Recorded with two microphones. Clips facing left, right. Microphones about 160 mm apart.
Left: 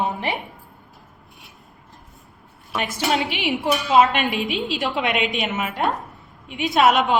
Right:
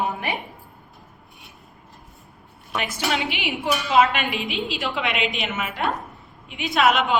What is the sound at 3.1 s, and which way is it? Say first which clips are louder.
A woman's voice: left 3 dB; 40° left (ahead or behind).